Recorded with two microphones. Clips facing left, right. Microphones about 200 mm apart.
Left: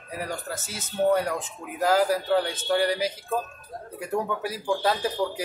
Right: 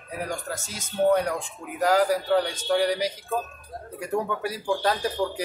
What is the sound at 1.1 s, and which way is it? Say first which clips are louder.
Speech: right 1 dB; 5° left (ahead or behind).